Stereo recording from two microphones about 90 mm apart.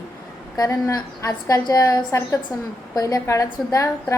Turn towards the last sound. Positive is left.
turn(degrees=35)  # may be behind; listen again after turning